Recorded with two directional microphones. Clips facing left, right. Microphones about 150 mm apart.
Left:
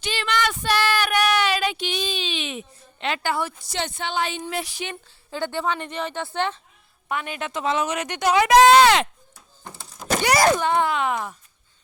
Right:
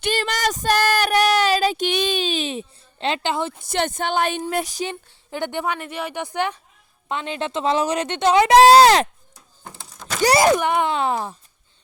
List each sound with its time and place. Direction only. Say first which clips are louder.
0.0 s speech: right 2 dB; 45° right (ahead or behind)
1.9 s a woman's voice: right 6 dB; 60° right (ahead or behind); by 3.5 s 25° right (ahead or behind)
3.6 s a woman's voice: right 6 dB; 50° right (ahead or behind)
5.3 s a woman's voice: right 1 dB; 15° right (ahead or behind)
7.1 s speech: right 3 dB; 25° right (ahead or behind)
10.4 s a woman's voice: right 2 dB; 15° right (ahead or behind)
10.9 s speech: right 2 dB; 30° right (ahead or behind)